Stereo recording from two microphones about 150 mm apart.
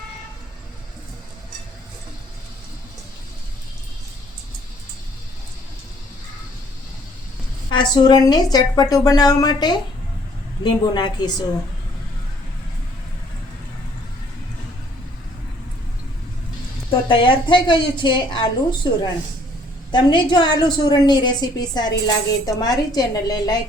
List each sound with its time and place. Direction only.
7.7 s a woman's voice: 30° left (ahead or behind)
16.9 s a woman's voice: 35° left (ahead or behind)
19.9 s a woman's voice: 30° left (ahead or behind)